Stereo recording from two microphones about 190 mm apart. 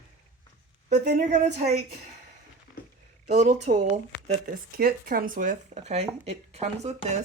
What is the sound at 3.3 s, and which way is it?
Speech, 35° right (ahead or behind).